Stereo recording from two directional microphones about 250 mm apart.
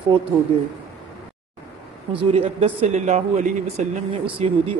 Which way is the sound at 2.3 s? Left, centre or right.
Right.